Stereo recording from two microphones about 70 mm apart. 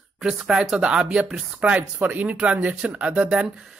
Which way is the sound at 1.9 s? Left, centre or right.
Right.